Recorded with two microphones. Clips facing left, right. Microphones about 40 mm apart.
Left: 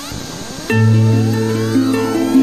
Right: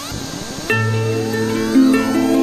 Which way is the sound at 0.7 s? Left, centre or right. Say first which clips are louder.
Left 3 dB; centre.